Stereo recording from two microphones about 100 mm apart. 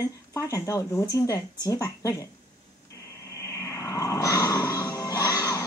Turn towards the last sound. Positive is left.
turn(degrees=35)  # may be behind; listen again after turning